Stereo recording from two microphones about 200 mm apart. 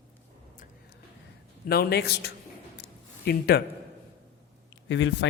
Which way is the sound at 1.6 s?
50° left (ahead or behind).